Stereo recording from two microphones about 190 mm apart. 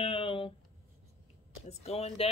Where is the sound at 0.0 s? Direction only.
30° left (ahead or behind).